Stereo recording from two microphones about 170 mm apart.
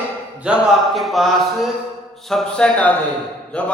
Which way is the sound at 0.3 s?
5° right (ahead or behind).